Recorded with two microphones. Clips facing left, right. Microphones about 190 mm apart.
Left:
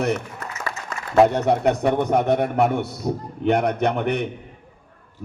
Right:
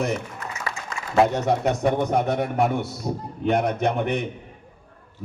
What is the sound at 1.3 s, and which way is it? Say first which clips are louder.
A man's voice: left 3 dB; 60° left (ahead or behind).